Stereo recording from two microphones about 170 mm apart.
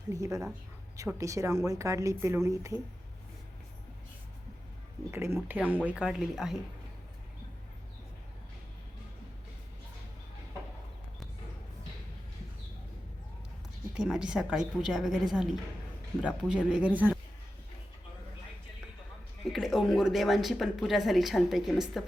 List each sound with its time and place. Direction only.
0.1 s a woman's voice: 20° right (ahead or behind)
5.1 s speech: 15° right (ahead or behind)
13.9 s speech: 5° right (ahead or behind)
19.5 s speech: centre (ahead or behind)